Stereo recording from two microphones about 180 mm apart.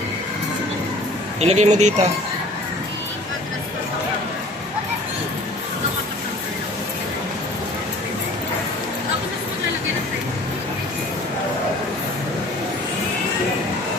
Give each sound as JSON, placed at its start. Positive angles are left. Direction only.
{"t": 1.4, "sound": "speech", "side_deg": -35}